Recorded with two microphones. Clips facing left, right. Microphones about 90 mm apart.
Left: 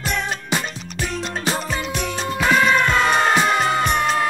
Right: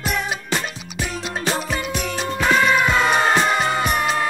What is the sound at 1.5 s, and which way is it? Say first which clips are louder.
Music: right 1 dB; centre (ahead or behind).